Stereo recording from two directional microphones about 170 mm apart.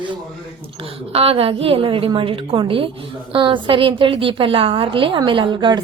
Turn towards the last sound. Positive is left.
turn(degrees=-25)  # may be behind; listen again after turning